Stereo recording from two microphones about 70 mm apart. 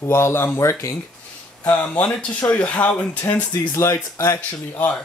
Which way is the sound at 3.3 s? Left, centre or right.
Left.